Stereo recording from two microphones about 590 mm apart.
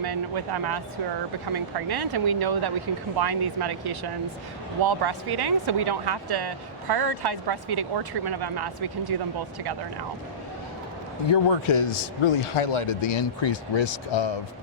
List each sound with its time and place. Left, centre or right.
0.0 s speech: right
11.3 s speech: left